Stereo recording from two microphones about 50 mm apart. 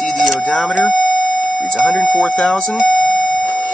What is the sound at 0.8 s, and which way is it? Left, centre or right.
Speech, left.